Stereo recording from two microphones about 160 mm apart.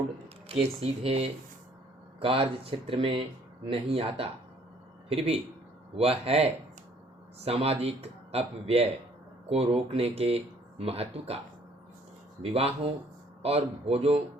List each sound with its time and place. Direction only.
0.6 s speech: 40° right (ahead or behind)
12.4 s speech: 40° right (ahead or behind)